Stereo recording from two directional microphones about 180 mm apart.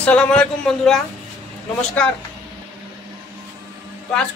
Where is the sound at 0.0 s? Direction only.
5° left (ahead or behind).